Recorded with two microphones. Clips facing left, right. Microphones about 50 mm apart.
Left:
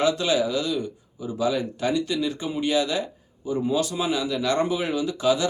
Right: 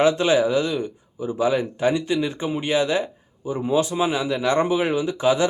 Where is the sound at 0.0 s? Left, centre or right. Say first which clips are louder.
Right 4 dB; right.